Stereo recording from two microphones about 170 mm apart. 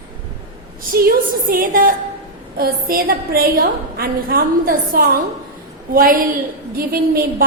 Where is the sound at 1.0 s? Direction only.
55° right (ahead or behind).